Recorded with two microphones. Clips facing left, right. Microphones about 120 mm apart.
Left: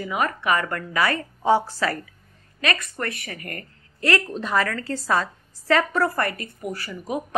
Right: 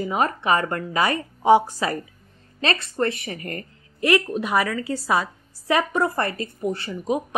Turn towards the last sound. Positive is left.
turn(degrees=-25)  # may be behind; listen again after turning